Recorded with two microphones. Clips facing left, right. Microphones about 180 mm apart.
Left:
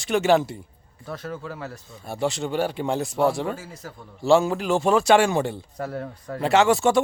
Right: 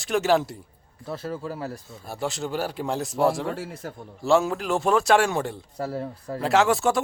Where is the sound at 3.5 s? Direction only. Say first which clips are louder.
Right 4 dB; 60° right (ahead or behind).